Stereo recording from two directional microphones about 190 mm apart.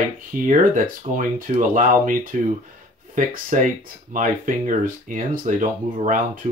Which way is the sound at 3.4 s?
45° right (ahead or behind).